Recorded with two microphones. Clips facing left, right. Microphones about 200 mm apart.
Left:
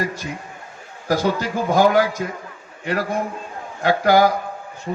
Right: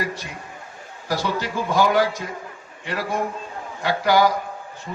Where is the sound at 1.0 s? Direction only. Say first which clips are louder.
Left 5 dB; 45° left (ahead or behind).